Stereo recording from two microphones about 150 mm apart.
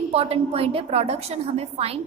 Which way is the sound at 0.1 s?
40° right (ahead or behind).